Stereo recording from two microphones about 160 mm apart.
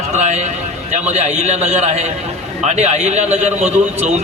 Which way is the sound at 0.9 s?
45° right (ahead or behind).